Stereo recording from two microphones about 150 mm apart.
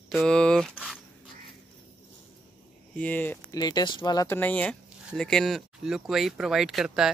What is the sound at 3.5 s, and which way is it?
Speech, 25° left (ahead or behind).